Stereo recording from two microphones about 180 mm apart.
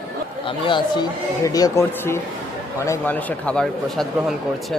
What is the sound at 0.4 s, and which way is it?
Speech, 25° left (ahead or behind).